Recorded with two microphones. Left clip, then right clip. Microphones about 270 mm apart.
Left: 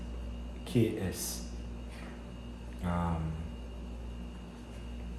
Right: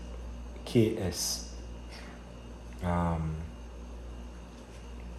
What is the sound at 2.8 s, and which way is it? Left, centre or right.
Speech, right.